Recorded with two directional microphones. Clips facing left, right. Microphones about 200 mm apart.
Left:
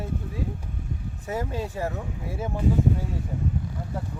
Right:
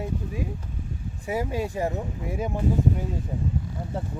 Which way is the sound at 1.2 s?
10° right (ahead or behind).